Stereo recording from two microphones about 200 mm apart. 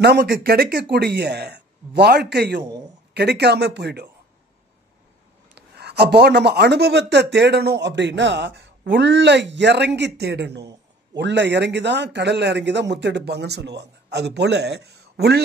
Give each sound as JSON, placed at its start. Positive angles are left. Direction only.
{"t": 0.0, "sound": "speech", "side_deg": -55}
{"t": 5.5, "sound": "speech", "side_deg": -55}